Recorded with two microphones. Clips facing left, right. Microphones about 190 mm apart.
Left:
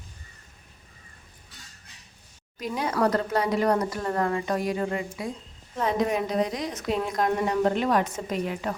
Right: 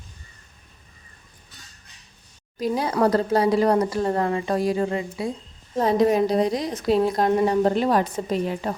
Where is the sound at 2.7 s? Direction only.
25° right (ahead or behind).